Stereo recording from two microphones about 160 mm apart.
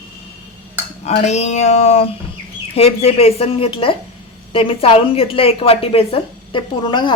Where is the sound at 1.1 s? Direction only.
45° left (ahead or behind).